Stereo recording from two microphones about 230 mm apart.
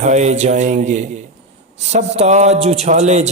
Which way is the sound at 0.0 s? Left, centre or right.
Right.